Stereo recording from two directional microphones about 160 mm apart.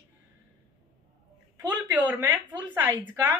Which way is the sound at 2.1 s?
10° right (ahead or behind).